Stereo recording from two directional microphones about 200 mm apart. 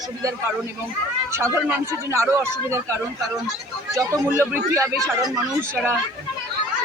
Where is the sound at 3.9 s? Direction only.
15° right (ahead or behind).